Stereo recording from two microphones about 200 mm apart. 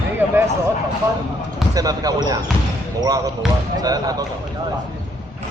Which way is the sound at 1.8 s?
20° right (ahead or behind).